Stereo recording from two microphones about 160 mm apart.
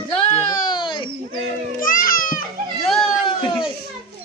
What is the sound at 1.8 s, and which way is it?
Music, 60° left (ahead or behind).